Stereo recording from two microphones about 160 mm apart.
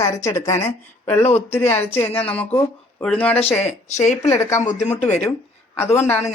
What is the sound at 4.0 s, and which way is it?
Speech, 45° left (ahead or behind).